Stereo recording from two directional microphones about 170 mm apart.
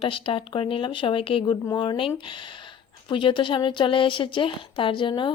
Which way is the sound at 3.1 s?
30° left (ahead or behind).